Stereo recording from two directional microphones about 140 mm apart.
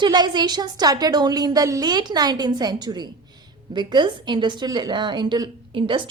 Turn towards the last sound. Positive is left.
turn(degrees=-35)  # may be behind; listen again after turning